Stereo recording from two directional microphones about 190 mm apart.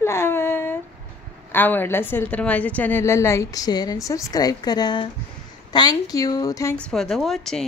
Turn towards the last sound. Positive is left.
turn(degrees=0)  # may be behind; listen again after turning